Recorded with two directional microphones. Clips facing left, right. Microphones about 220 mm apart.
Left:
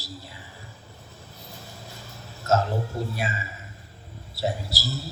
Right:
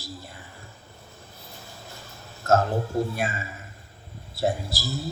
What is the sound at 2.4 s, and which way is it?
A man's voice, 50° right (ahead or behind).